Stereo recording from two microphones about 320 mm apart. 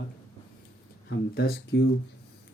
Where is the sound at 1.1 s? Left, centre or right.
Left.